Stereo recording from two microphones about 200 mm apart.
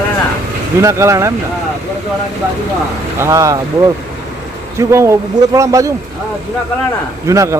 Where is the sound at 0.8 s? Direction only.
15° right (ahead or behind).